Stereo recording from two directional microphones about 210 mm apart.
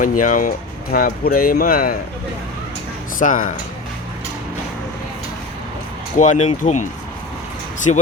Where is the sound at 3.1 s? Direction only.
40° left (ahead or behind).